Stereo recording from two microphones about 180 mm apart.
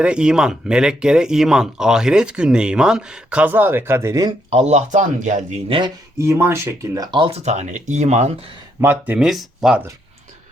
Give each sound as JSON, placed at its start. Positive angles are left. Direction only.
{"t": 0.0, "sound": "speech", "side_deg": -5}
{"t": 4.4, "sound": "speech", "side_deg": -35}
{"t": 5.6, "sound": "speech", "side_deg": -30}
{"t": 6.1, "sound": "speech", "side_deg": -15}
{"t": 8.8, "sound": "speech", "side_deg": -10}